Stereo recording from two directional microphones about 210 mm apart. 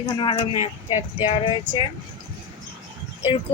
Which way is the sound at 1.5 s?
25° left (ahead or behind).